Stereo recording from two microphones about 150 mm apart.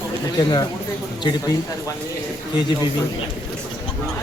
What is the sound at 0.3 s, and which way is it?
Speech, 25° left (ahead or behind).